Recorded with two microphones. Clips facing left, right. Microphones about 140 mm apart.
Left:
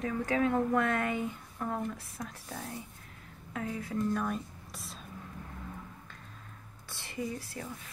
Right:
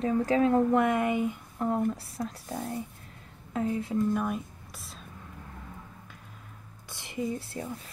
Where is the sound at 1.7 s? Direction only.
35° right (ahead or behind).